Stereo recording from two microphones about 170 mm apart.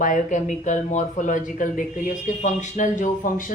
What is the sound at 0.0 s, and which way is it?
Speech, 45° left (ahead or behind).